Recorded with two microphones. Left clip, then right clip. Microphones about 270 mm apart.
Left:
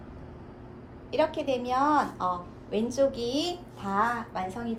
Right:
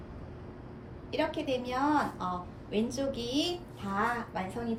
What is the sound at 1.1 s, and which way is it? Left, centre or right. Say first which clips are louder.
A woman's voice: left 5 dB; centre.